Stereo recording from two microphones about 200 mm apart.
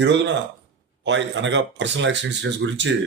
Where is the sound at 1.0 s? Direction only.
65° right (ahead or behind).